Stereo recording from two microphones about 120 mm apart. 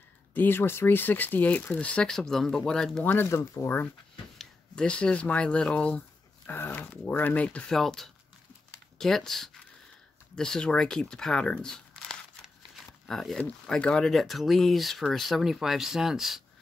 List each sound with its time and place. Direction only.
0.3 s speech: 15° left (ahead or behind)
3.0 s speech: 15° left (ahead or behind); by 16.4 s centre (ahead or behind)